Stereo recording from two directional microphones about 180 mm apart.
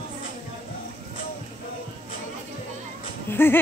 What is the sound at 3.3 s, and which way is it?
Speech, 10° left (ahead or behind).